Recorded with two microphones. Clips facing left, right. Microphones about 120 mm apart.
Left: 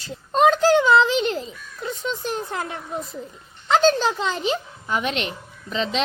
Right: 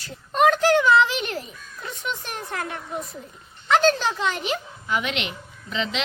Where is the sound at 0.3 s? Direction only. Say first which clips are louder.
Left 2 dB; 30° left (ahead or behind).